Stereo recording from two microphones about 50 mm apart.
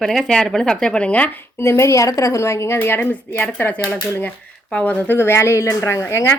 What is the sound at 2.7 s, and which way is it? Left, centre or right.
A woman's voice, left.